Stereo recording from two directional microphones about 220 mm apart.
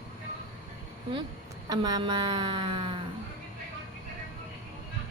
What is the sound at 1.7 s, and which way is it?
Speech, 20° right (ahead or behind).